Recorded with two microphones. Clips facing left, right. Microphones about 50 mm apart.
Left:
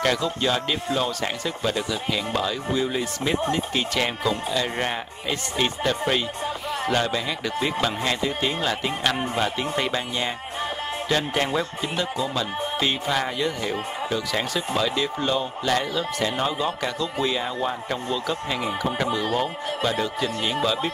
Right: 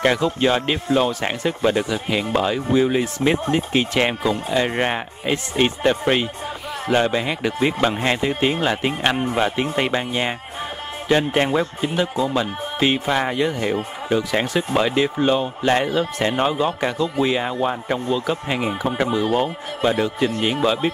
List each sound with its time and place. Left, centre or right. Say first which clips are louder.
0.0 s a man's voice: right 5 dB; right
18.7 s a man's voice: right 3 dB; centre